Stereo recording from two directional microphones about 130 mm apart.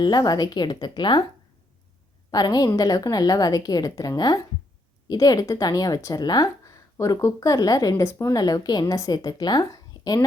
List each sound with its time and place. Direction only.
0.0 s speech: 30° left (ahead or behind)
2.3 s speech: 30° left (ahead or behind)